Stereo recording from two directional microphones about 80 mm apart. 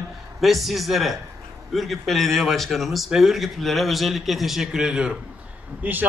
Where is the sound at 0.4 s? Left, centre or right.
Centre.